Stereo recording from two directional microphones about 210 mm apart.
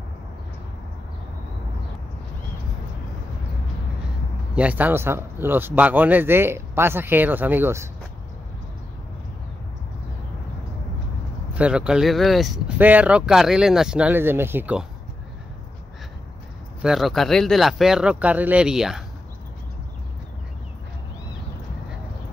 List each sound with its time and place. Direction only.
4.6 s speech: 5° right (ahead or behind)
11.5 s speech: 5° right (ahead or behind)
16.8 s speech: centre (ahead or behind)